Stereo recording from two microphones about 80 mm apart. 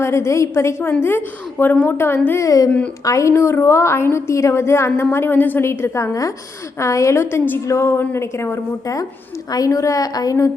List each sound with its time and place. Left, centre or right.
0.0 s a woman's voice: left
2.4 s a woman's voice: left